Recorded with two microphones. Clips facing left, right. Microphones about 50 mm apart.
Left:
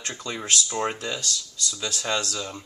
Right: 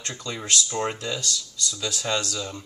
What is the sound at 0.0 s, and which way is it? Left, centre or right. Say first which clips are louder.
Speech: left 1 dB; centre.